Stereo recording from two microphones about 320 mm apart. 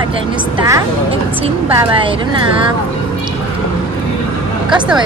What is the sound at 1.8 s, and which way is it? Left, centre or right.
Speech, centre.